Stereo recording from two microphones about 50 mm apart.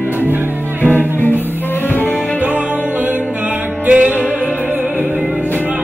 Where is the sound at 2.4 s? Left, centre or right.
Right.